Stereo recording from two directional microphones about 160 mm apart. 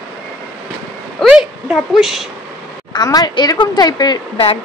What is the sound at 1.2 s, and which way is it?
Speech, centre (ahead or behind).